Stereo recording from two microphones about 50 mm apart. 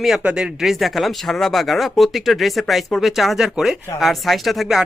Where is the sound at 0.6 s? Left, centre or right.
Centre.